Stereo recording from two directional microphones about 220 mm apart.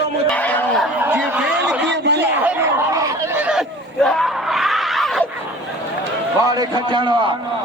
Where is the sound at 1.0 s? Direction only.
10° right (ahead or behind).